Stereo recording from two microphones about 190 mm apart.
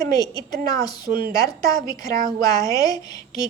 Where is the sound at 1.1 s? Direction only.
50° right (ahead or behind).